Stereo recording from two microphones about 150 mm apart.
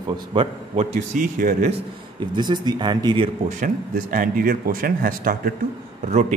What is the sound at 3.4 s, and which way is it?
Speech, 60° right (ahead or behind).